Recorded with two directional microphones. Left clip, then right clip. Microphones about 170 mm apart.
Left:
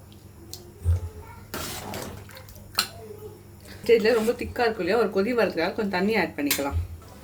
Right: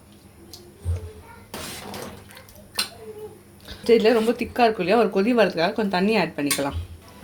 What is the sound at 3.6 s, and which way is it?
Speech, 30° right (ahead or behind).